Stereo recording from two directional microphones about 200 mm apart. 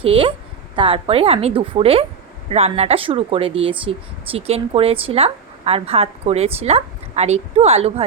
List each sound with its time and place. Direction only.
0.0 s speech: 25° right (ahead or behind)